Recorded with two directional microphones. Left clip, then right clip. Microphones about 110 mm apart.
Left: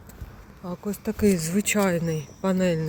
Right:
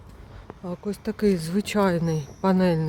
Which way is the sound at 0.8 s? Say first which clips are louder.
Even; 25° right (ahead or behind).